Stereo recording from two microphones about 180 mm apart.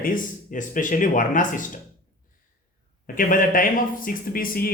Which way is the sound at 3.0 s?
50° left (ahead or behind).